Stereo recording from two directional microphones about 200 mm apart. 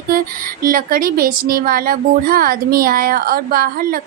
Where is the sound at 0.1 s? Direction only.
45° right (ahead or behind).